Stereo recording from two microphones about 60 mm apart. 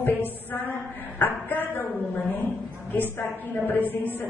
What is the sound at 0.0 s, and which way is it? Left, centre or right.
A woman's voice, left.